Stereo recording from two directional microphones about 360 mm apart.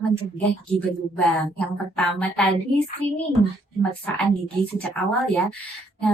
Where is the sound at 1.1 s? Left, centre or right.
Centre.